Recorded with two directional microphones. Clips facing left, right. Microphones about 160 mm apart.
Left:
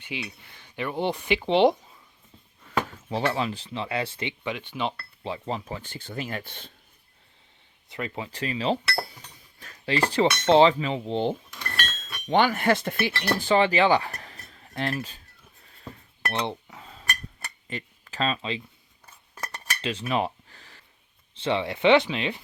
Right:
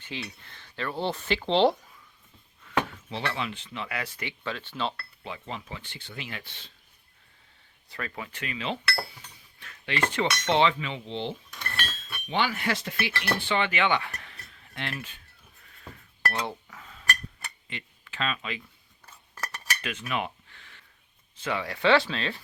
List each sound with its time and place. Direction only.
0.0 s speech: 15° left (ahead or behind)
2.6 s speech: 40° left (ahead or behind); by 4.9 s 15° left (ahead or behind)
5.2 s speech: 35° left (ahead or behind); by 6.7 s 50° left (ahead or behind)
7.9 s cutlery: 20° left (ahead or behind); by 11.3 s 45° left (ahead or behind)
11.8 s chink: 10° right (ahead or behind)
12.3 s speech: 50° left (ahead or behind)
13.1 s speech: 35° left (ahead or behind)
16.3 s chink: 25° left (ahead or behind)
17.7 s speech: 40° left (ahead or behind)
19.8 s cutlery: 30° left (ahead or behind)
21.3 s speech: 25° left (ahead or behind)